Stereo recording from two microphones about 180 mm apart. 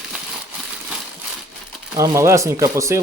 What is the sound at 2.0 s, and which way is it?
Speech, 15° right (ahead or behind).